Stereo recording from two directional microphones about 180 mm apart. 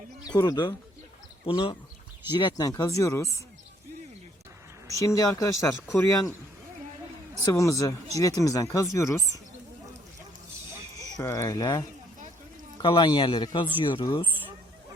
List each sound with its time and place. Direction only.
0.3 s speech: 20° left (ahead or behind)
4.9 s speech: 20° left (ahead or behind)
7.4 s speech: 20° left (ahead or behind)
11.0 s speech: 15° left (ahead or behind)